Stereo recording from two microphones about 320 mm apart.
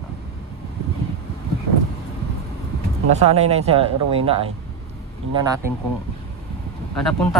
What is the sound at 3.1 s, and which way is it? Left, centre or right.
Speech, centre.